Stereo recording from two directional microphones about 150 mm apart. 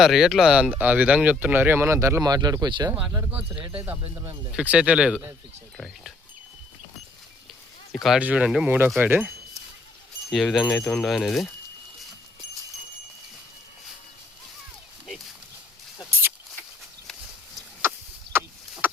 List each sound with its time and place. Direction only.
0.0 s speech: centre (ahead or behind); by 2.9 s 30° right (ahead or behind)
2.9 s speech: 10° right (ahead or behind)
3.6 s speech: 35° right (ahead or behind)
4.1 s speech: 20° right (ahead or behind)
4.5 s speech: 10° right (ahead or behind)
7.9 s speech: centre (ahead or behind)
10.3 s speech: centre (ahead or behind)